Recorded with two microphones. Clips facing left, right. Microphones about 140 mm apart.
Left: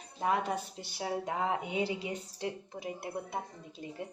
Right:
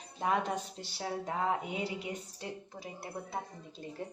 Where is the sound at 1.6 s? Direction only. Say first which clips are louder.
Left 3 dB; 25° left (ahead or behind).